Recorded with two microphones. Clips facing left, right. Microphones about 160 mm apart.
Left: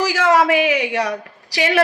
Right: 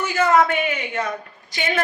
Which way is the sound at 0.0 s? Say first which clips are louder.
Left 2 dB; 90° left.